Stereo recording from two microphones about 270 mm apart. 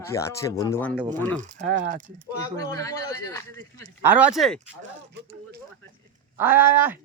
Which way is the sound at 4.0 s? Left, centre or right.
Centre.